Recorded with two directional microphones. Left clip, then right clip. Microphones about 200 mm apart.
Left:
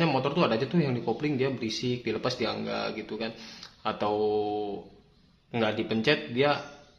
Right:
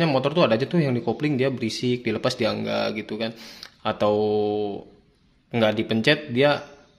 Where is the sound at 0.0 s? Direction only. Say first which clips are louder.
Right 5 dB; 45° right (ahead or behind).